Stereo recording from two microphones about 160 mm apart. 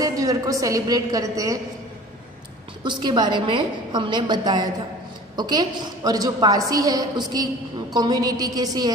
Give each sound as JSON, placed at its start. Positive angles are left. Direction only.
{"t": 0.0, "sound": "a woman's voice", "side_deg": -20}
{"t": 2.8, "sound": "a woman's voice", "side_deg": -30}